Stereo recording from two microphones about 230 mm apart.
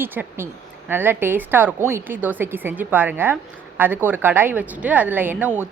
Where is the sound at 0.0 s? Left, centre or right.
Centre.